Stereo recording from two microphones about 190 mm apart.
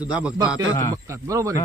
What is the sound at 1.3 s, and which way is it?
Speech, 15° right (ahead or behind).